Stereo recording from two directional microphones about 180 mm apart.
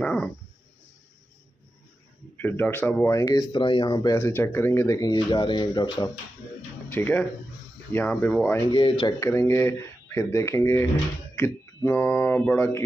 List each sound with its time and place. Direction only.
0.0 s a sound: 5° left (ahead or behind)
2.3 s speech: 10° left (ahead or behind)
6.9 s speech: 10° left (ahead or behind)
8.6 s speech: 30° left (ahead or behind)
9.2 s speech: 15° left (ahead or behind)